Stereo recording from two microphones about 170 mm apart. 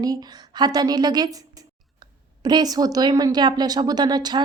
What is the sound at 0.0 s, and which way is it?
A woman's voice, 20° right (ahead or behind).